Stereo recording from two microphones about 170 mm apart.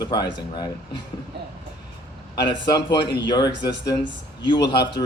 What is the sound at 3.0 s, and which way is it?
Speech, 90° left.